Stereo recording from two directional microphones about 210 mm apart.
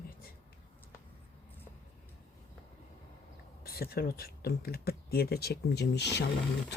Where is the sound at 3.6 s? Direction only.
45° left (ahead or behind).